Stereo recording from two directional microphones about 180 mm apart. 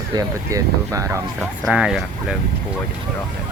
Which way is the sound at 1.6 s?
5° right (ahead or behind).